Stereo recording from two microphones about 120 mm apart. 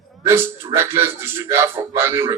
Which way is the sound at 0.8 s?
20° right (ahead or behind).